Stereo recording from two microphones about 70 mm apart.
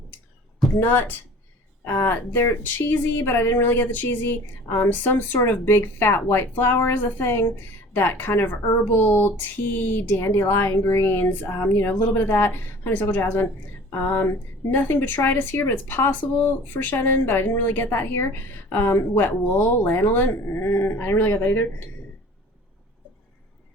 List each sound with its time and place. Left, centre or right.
0.8 s a woman's voice: left